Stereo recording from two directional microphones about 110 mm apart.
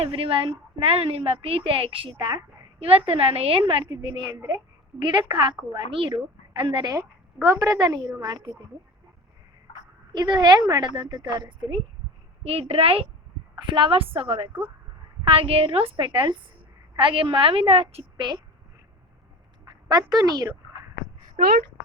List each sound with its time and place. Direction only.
0.0 s a woman's voice: 55° right (ahead or behind)
3.7 s a woman's voice: 50° right (ahead or behind); by 4.6 s 35° right (ahead or behind)
4.9 s a woman's voice: 45° right (ahead or behind)
7.4 s a woman's voice: 30° right (ahead or behind)
10.1 s a woman's voice: 40° right (ahead or behind)
12.4 s a woman's voice: 65° right (ahead or behind)
19.9 s a woman's voice: 35° right (ahead or behind)